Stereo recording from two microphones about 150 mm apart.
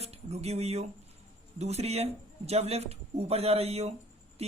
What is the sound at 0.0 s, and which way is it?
A man's voice, 45° right (ahead or behind).